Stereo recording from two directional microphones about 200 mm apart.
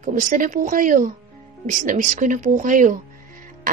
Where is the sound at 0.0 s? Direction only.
40° right (ahead or behind).